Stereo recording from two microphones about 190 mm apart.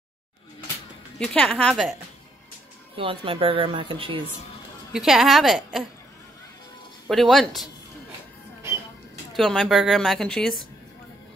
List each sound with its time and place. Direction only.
1.2 s a woman's voice: 5° left (ahead or behind)
3.0 s speech: 30° right (ahead or behind)
4.9 s a woman's voice: centre (ahead or behind)
7.1 s a woman's voice: centre (ahead or behind)
9.3 s a woman's voice: centre (ahead or behind)